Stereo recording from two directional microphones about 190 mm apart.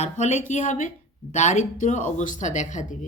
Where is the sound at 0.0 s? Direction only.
40° left (ahead or behind).